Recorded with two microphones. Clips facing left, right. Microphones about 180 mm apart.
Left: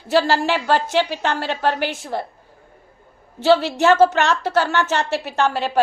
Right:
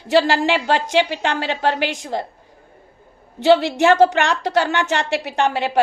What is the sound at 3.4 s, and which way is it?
A woman's voice, 15° right (ahead or behind).